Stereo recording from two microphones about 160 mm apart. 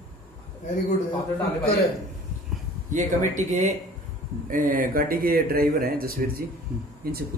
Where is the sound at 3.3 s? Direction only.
50° right (ahead or behind).